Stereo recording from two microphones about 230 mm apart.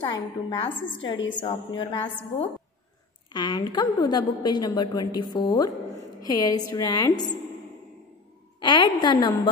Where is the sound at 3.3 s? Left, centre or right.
Centre.